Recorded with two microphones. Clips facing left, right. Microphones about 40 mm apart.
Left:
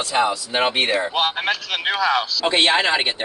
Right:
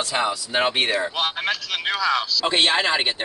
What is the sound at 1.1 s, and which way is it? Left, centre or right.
A man's voice, left.